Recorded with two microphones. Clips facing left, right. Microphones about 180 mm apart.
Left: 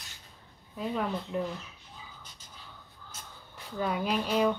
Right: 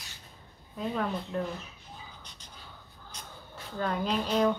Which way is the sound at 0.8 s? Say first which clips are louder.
Even; 5° left (ahead or behind).